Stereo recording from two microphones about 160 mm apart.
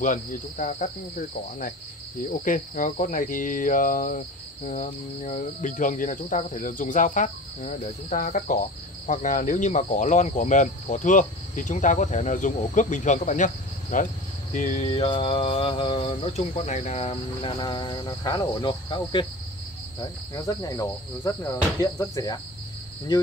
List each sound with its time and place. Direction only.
0.0 s speech: 55° left (ahead or behind)
2.4 s cricket: 55° left (ahead or behind)
4.6 s speech: 50° left (ahead or behind)
15.0 s cricket: 35° left (ahead or behind)